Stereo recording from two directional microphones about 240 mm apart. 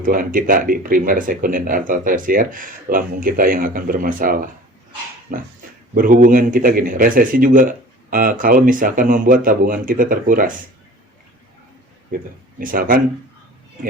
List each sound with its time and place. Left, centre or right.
0.0 s speech: right
12.5 s speech: right